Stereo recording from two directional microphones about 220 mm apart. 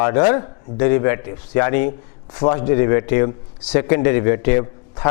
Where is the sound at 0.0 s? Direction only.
20° left (ahead or behind).